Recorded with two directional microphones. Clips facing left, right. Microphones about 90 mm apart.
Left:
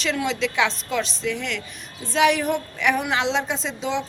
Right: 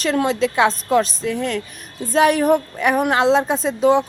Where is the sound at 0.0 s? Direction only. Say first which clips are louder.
Right 6 dB; 45° right (ahead or behind).